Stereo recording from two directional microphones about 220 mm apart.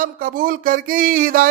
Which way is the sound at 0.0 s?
40° right (ahead or behind).